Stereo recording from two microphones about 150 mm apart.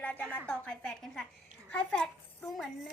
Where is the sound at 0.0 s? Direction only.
10° left (ahead or behind).